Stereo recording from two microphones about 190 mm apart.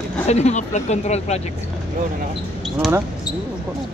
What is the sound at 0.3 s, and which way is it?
Speech, 35° left (ahead or behind).